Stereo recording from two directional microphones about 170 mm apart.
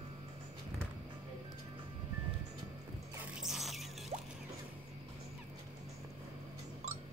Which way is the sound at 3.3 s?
Centre (ahead or behind).